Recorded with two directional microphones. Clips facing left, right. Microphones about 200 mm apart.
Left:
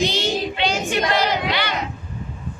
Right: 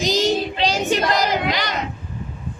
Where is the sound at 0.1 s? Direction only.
35° right (ahead or behind).